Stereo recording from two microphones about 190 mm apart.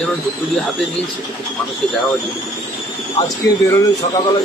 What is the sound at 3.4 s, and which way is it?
Speech, 15° left (ahead or behind).